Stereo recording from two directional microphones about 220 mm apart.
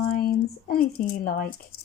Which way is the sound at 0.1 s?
40° left (ahead or behind).